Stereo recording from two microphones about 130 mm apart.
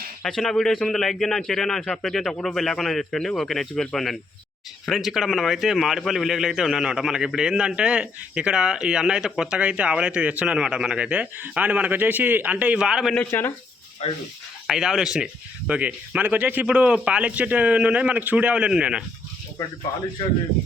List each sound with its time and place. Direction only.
0.2 s a man's voice: 5° left (ahead or behind)
13.1 s speech: 15° left (ahead or behind)
14.0 s speech: 50° left (ahead or behind)
14.7 s speech: 5° right (ahead or behind)